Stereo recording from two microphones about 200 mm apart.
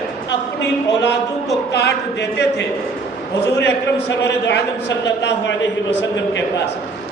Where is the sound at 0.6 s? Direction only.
60° left (ahead or behind).